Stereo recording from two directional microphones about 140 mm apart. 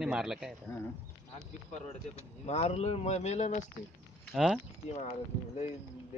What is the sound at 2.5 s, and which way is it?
Speech, 50° left (ahead or behind).